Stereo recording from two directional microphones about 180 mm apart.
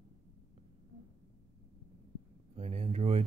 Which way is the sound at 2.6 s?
35° right (ahead or behind).